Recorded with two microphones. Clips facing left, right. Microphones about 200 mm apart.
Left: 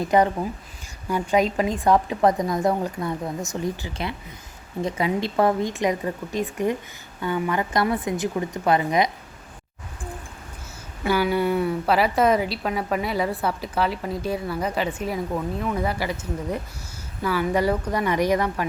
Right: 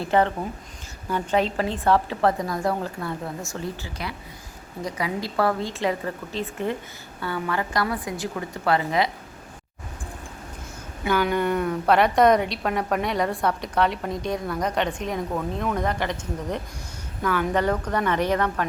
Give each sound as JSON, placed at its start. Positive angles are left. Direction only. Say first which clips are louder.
{"t": 0.0, "sound": "a woman's voice", "louder": "left 2 dB", "side_deg": 15}
{"t": 11.1, "sound": "a woman's voice", "louder": "left 1 dB", "side_deg": 10}